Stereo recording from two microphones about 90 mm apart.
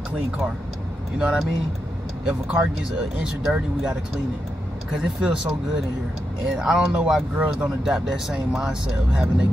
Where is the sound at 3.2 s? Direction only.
10° right (ahead or behind).